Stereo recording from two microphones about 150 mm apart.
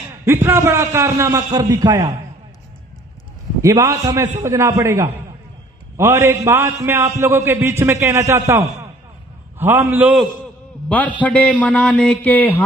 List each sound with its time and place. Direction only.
0.3 s a man's voice: 15° right (ahead or behind)
3.6 s a man's voice: 20° right (ahead or behind)
10.8 s a man's voice: 10° left (ahead or behind)